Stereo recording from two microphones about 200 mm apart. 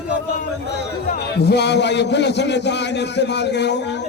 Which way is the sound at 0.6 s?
55° left (ahead or behind).